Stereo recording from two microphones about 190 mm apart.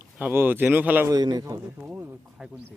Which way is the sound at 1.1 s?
20° right (ahead or behind).